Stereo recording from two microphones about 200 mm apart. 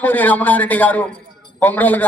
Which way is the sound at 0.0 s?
10° left (ahead or behind).